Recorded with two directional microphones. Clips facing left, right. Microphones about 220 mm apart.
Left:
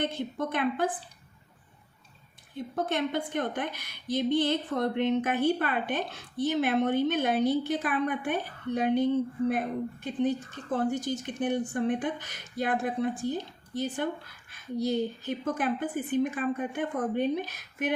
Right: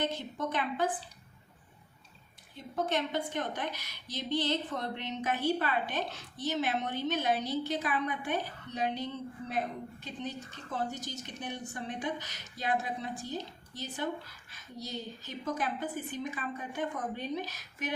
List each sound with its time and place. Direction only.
0.0 s a woman's voice: 55° left (ahead or behind)
2.7 s a woman's voice: 55° left (ahead or behind)